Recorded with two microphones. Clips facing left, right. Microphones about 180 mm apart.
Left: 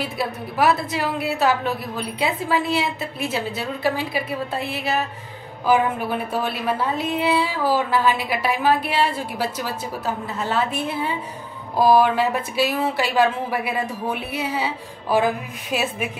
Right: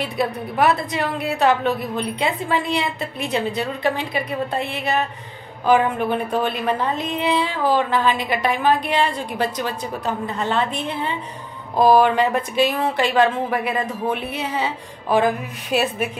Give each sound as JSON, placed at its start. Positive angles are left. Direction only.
{"t": 0.0, "sound": "a woman's voice", "side_deg": 0}